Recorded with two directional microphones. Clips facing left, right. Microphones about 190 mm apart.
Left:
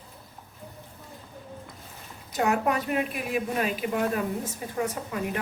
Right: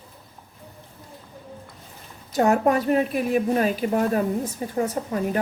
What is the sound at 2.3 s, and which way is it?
A woman's voice, 40° right (ahead or behind).